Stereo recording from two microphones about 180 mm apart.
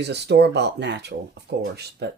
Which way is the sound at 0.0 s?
70° right (ahead or behind).